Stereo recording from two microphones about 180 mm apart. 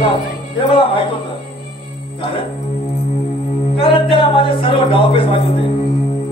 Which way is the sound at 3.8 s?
30° left (ahead or behind).